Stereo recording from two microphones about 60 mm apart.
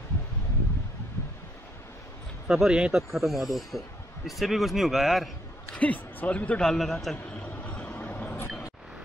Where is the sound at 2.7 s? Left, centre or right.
Centre.